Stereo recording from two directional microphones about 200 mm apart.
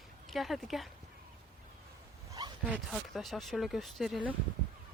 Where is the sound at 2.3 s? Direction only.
20° right (ahead or behind).